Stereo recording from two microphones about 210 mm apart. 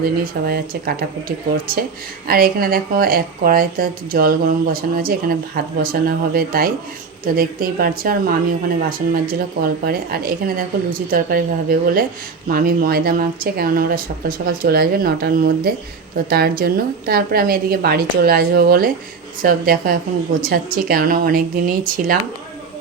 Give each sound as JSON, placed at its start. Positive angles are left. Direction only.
{"t": 0.0, "sound": "a woman's voice", "side_deg": -45}